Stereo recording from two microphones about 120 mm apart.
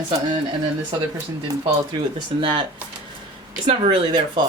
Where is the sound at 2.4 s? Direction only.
45° right (ahead or behind).